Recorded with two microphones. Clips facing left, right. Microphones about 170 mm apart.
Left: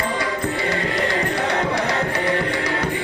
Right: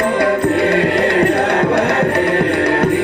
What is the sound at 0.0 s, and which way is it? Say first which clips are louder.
Music: right 9 dB; 60° right (ahead or behind).